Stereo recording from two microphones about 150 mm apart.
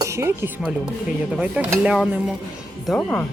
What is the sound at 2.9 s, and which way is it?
Speech, 10° left (ahead or behind).